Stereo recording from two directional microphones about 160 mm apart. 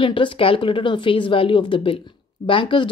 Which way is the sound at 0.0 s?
30° left (ahead or behind).